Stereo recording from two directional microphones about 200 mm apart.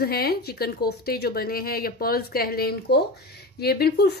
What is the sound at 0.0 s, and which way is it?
A woman's voice, 50° left (ahead or behind).